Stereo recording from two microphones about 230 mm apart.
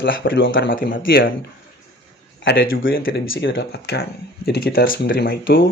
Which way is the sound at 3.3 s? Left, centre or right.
Left.